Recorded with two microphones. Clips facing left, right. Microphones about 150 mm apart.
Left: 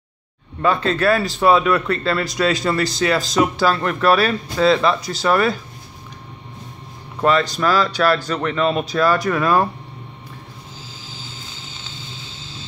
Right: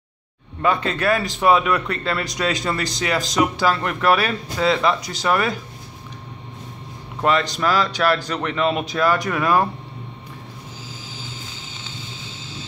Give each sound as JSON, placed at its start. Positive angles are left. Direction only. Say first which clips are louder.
{"t": 0.6, "sound": "speech", "louder": "left 2 dB", "side_deg": -15}
{"t": 7.4, "sound": "speech", "louder": "left 2 dB", "side_deg": -20}